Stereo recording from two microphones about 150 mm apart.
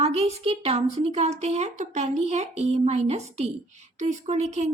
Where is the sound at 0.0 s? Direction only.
45° right (ahead or behind).